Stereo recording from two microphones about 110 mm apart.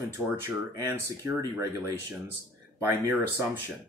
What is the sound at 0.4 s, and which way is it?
Speech, 25° right (ahead or behind).